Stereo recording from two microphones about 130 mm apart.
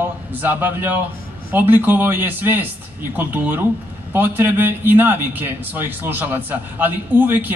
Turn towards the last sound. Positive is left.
turn(degrees=-15)  # may be behind; listen again after turning